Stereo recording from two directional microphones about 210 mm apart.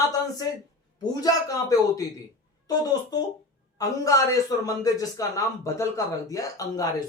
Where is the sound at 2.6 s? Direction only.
20° left (ahead or behind).